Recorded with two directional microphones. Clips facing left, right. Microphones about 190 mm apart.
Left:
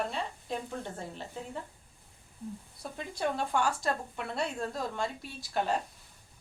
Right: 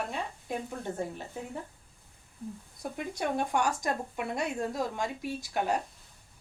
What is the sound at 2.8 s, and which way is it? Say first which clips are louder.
Speech: right 2 dB; 15° right (ahead or behind).